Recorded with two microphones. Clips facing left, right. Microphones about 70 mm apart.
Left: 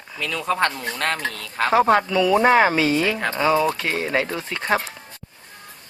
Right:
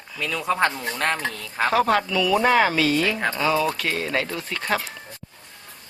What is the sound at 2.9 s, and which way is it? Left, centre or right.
Speech, centre.